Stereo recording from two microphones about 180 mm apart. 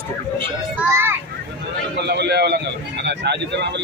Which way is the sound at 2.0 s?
70° right (ahead or behind).